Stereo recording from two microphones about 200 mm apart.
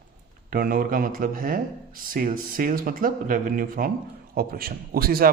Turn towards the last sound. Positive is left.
turn(degrees=-50)  # may be behind; listen again after turning